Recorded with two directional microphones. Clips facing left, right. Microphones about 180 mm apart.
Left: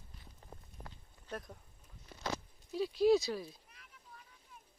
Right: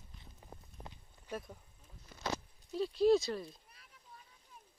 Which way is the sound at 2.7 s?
5° left (ahead or behind).